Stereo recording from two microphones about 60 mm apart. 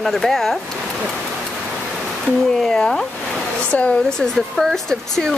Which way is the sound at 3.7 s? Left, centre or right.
Left.